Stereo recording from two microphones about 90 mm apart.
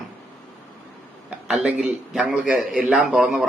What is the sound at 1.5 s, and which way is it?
A man's voice, 15° right (ahead or behind).